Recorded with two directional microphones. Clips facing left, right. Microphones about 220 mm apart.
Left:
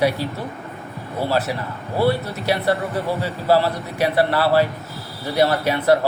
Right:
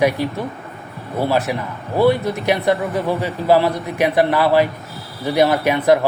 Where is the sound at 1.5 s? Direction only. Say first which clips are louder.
Right 3 dB; 15° right (ahead or behind).